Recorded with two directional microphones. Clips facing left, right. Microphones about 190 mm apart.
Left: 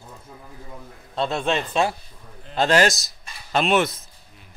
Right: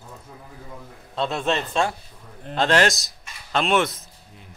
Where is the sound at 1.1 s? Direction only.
Centre (ahead or behind).